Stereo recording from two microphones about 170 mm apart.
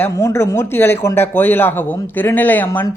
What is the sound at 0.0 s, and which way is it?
Speech, 15° left (ahead or behind).